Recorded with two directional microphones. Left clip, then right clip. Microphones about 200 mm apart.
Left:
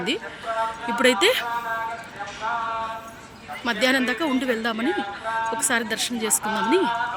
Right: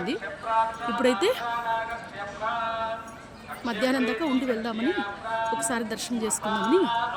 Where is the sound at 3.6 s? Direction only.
5° right (ahead or behind).